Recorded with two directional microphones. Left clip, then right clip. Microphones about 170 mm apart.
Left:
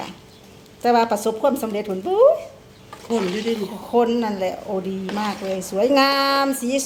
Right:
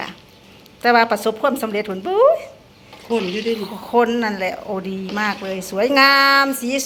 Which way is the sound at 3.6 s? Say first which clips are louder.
Even; 25° right (ahead or behind).